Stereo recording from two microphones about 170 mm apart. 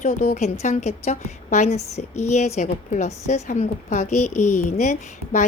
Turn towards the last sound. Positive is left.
turn(degrees=45)  # may be behind; listen again after turning